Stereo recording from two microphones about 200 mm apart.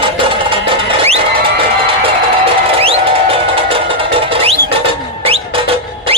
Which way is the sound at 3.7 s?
25° right (ahead or behind).